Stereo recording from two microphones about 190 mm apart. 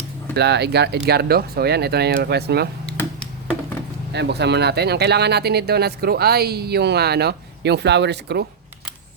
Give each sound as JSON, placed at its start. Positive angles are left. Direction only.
{"t": 0.3, "sound": "speech", "side_deg": -60}
{"t": 4.1, "sound": "speech", "side_deg": -60}